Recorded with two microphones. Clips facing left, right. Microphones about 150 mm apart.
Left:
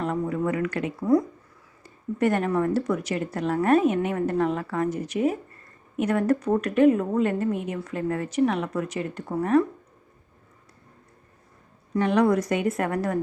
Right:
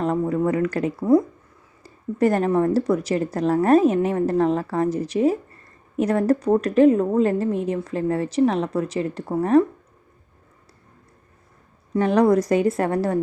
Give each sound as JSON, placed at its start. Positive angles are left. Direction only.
{"t": 0.0, "sound": "a woman's voice", "side_deg": -35}
{"t": 11.9, "sound": "a woman's voice", "side_deg": -35}